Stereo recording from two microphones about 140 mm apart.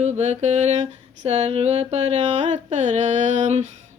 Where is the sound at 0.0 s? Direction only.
55° right (ahead or behind).